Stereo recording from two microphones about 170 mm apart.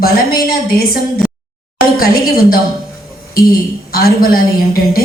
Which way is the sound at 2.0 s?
60° left (ahead or behind).